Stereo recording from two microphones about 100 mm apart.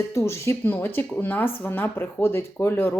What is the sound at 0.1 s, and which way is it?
Speech, 30° left (ahead or behind).